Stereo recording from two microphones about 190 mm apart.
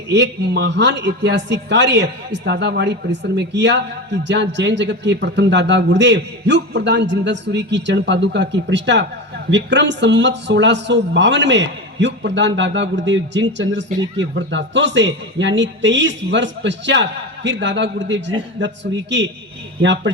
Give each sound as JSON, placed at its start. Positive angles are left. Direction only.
{"t": 0.1, "sound": "a man's voice", "side_deg": -65}
{"t": 19.8, "sound": "a man's voice", "side_deg": -70}